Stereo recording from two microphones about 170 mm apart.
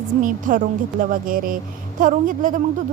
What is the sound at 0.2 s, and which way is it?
A woman's voice, 50° right (ahead or behind).